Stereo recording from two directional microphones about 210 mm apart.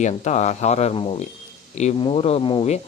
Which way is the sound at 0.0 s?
35° left (ahead or behind).